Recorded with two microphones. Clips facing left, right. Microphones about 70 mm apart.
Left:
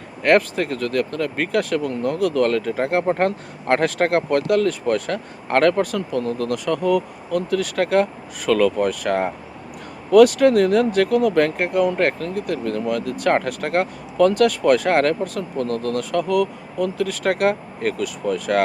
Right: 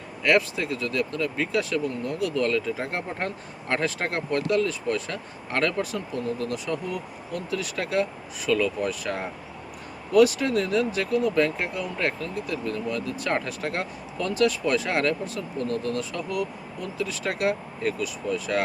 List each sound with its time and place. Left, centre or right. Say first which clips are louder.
0.2 s speech: left 6 dB; left
8.4 s speech: left 7 dB; left